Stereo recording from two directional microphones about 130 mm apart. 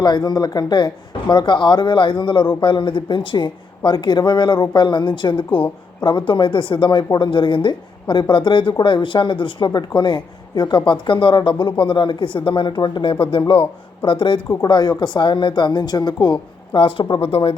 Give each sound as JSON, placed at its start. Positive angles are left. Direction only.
{"t": 0.0, "sound": "a woman's voice", "side_deg": 35}